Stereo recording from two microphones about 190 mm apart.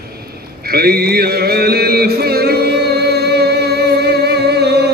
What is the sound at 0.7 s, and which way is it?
Mantra, 55° right (ahead or behind).